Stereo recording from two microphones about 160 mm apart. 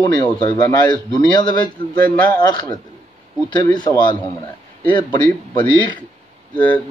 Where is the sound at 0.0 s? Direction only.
25° left (ahead or behind).